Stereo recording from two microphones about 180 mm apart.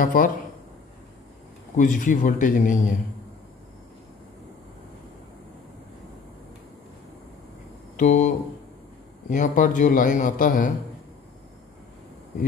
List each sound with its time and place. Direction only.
0.0 s a man's voice: 50° left (ahead or behind)
1.8 s a man's voice: 45° left (ahead or behind)
8.0 s a man's voice: 45° left (ahead or behind)
9.3 s a man's voice: 45° left (ahead or behind)